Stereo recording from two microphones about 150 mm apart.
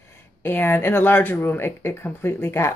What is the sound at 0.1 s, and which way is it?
Speech, 15° left (ahead or behind).